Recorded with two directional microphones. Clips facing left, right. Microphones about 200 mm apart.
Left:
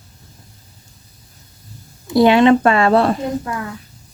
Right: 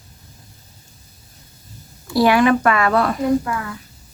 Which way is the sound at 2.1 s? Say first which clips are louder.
Left 4 dB; 20° left (ahead or behind).